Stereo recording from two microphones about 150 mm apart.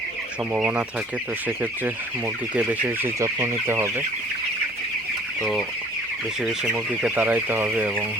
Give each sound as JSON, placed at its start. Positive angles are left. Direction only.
{"t": 0.5, "sound": "speech", "side_deg": -10}
{"t": 2.6, "sound": "speech", "side_deg": -10}
{"t": 5.4, "sound": "chicken", "side_deg": 0}
{"t": 6.4, "sound": "speech", "side_deg": -5}